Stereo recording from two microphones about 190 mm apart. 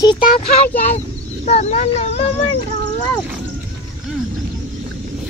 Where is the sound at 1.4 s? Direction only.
35° left (ahead or behind).